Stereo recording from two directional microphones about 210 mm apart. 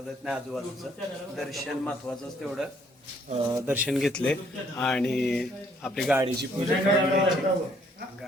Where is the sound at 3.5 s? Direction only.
10° right (ahead or behind).